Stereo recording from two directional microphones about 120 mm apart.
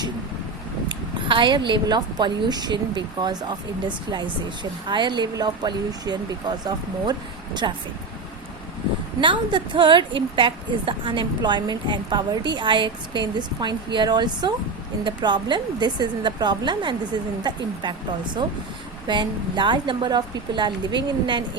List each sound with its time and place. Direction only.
0.9 s a woman's voice: 40° right (ahead or behind)
9.2 s a woman's voice: 40° right (ahead or behind)
19.0 s a woman's voice: 40° right (ahead or behind)